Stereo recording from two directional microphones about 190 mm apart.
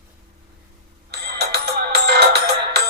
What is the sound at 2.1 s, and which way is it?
Music, 60° right (ahead or behind).